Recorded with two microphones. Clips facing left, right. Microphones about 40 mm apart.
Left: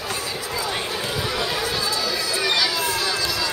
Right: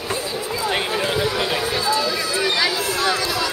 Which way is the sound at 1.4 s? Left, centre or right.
Right.